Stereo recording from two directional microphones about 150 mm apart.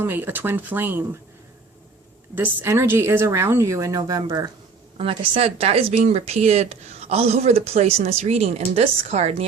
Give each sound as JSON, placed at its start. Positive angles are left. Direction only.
{"t": 0.0, "sound": "a woman's voice", "side_deg": -15}
{"t": 2.3, "sound": "a woman's voice", "side_deg": -15}
{"t": 4.9, "sound": "speech", "side_deg": -35}